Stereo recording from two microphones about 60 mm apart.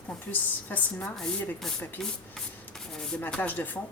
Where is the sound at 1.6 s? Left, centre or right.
Centre.